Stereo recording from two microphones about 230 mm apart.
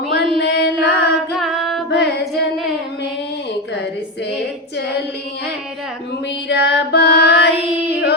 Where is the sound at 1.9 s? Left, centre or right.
Left.